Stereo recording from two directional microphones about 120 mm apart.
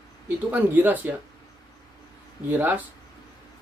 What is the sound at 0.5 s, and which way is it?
Speech, 15° right (ahead or behind).